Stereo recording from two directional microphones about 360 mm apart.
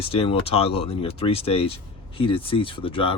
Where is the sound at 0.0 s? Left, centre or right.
Centre.